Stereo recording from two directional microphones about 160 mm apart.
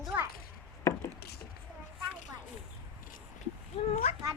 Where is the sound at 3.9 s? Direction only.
40° left (ahead or behind).